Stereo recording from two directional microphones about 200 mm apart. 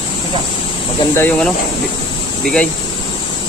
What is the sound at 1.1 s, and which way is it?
Speech, 10° left (ahead or behind).